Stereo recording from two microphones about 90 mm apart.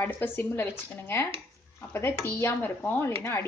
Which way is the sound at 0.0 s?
20° left (ahead or behind).